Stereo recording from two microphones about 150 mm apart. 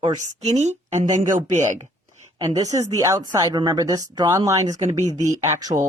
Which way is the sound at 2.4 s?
25° right (ahead or behind).